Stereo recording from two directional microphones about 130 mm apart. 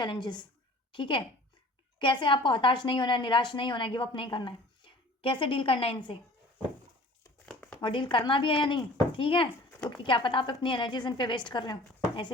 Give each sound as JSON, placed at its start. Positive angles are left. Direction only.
{"t": 0.0, "sound": "a woman's voice", "side_deg": 35}
{"t": 7.4, "sound": "crumpling", "side_deg": 10}
{"t": 7.8, "sound": "a woman's voice", "side_deg": 40}